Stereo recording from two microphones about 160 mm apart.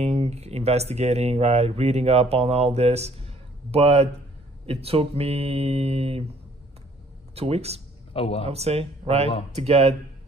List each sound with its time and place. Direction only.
0.0 s speech: 40° right (ahead or behind)
7.3 s speech: 40° right (ahead or behind)
8.1 s a man's voice: 35° left (ahead or behind)
8.5 s speech: 40° right (ahead or behind)